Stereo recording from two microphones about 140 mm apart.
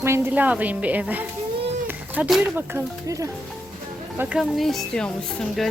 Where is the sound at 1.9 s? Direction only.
10° right (ahead or behind).